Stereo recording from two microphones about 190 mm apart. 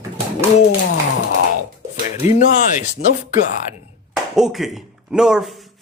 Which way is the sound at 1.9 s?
40° left (ahead or behind).